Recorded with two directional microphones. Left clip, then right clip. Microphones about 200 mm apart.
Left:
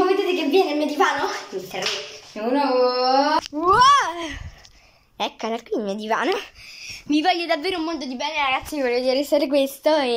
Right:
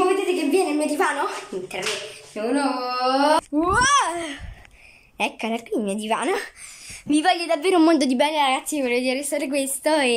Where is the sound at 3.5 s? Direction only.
5° left (ahead or behind); by 7.7 s 10° right (ahead or behind).